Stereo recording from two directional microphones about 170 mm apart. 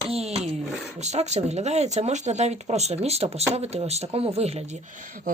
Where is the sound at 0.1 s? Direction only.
35° right (ahead or behind).